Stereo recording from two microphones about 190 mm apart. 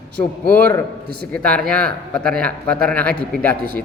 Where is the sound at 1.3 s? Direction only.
5° left (ahead or behind).